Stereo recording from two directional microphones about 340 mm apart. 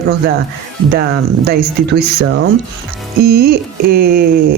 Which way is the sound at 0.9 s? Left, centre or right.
Right.